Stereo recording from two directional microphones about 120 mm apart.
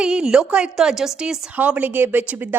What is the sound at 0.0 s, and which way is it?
A woman's voice, 5° right (ahead or behind).